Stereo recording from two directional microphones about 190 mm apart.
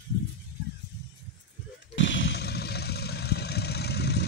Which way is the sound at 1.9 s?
75° left (ahead or behind).